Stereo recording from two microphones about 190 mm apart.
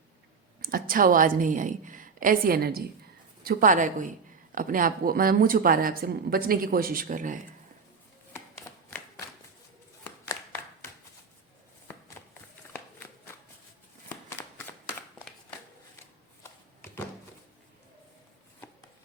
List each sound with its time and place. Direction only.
0.6 s a woman's voice: 50° right (ahead or behind)
8.3 s a sound: 15° left (ahead or behind)
16.4 s shuffling cards: 15° left (ahead or behind)